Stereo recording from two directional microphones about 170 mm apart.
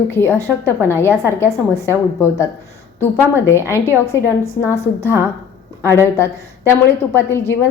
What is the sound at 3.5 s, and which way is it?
A woman's voice, 15° left (ahead or behind).